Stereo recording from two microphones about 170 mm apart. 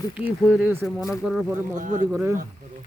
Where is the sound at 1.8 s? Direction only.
50° right (ahead or behind).